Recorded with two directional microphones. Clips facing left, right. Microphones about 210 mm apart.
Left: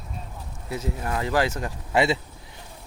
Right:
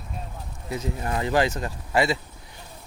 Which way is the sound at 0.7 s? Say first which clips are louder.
Even; 5° left (ahead or behind).